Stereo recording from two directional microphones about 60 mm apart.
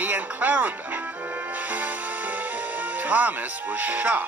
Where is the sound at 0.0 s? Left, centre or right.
Right.